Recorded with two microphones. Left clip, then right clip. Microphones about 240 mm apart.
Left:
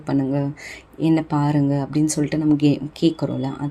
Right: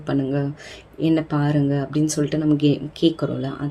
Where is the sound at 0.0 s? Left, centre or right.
Centre.